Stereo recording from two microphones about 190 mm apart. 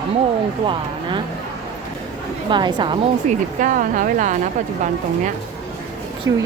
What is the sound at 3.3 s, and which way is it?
Speech, 45° right (ahead or behind).